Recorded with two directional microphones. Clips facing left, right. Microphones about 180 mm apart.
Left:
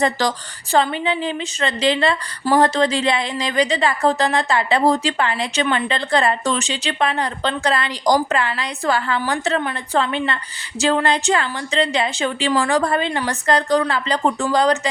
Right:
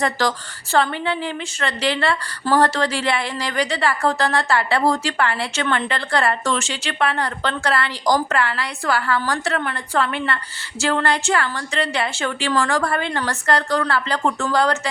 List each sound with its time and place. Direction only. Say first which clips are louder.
0.0 s a woman's voice: left 2 dB; 20° left (ahead or behind)